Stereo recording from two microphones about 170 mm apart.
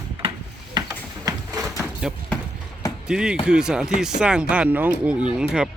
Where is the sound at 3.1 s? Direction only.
5° right (ahead or behind).